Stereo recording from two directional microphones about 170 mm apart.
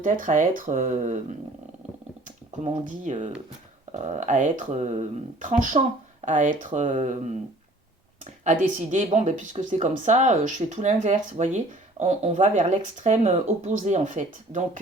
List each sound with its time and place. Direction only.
0.0 s speech: 50° right (ahead or behind)
2.8 s speech: 50° right (ahead or behind)